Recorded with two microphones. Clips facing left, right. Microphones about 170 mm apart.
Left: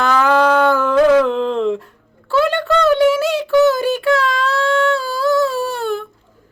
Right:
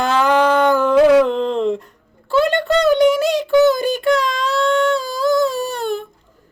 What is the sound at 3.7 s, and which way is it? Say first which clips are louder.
Child singing: even; 5° left (ahead or behind).